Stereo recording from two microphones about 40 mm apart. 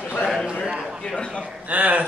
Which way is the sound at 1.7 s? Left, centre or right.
Right.